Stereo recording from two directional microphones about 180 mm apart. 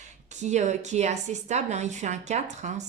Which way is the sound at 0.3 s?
40° right (ahead or behind).